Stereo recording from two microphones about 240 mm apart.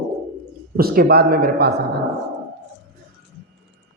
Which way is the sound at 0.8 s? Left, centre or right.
Right.